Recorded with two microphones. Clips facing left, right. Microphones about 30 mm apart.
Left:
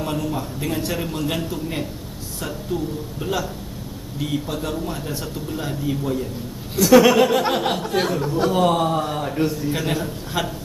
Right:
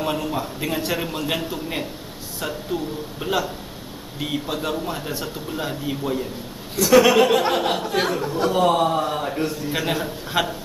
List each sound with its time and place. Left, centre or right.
0.0 s a man's voice: centre
6.8 s a man's voice: centre